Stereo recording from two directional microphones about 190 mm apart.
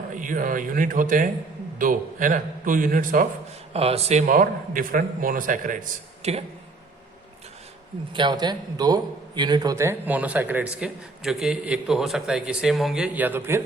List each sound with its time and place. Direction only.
0.1 s a man's voice: 45° right (ahead or behind)
3.7 s a man's voice: 30° right (ahead or behind)
8.1 s a man's voice: 25° right (ahead or behind)